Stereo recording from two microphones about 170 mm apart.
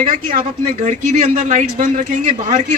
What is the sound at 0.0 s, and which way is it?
Speech, 50° right (ahead or behind).